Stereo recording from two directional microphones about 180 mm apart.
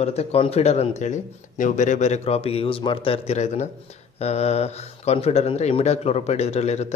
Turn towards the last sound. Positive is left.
turn(degrees=40)  # may be behind; listen again after turning